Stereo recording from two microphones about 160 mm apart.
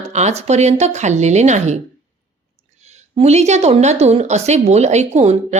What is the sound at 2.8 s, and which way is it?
A woman's voice, 40° right (ahead or behind).